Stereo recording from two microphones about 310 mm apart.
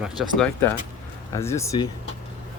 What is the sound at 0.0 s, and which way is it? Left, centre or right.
Speech, centre.